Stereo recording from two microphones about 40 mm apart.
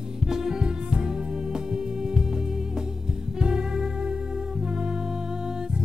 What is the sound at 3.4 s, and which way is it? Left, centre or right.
Music, centre.